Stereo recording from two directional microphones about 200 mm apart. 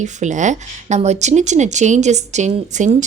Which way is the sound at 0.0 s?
35° right (ahead or behind).